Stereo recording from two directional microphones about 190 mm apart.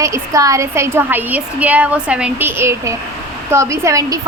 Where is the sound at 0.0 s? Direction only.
15° right (ahead or behind).